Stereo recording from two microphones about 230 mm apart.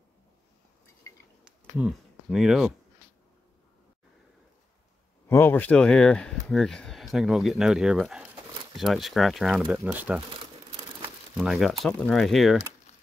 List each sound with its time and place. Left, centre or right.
1.8 s speech: centre
5.3 s speech: centre
11.3 s speech: centre